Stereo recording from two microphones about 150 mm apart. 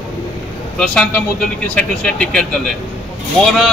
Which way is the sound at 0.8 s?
5° left (ahead or behind).